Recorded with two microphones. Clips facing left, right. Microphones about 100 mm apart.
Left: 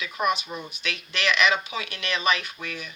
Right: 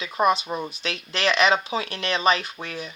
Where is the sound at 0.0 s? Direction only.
30° right (ahead or behind).